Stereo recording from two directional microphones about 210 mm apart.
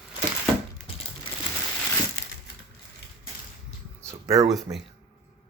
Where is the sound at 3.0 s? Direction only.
50° left (ahead or behind).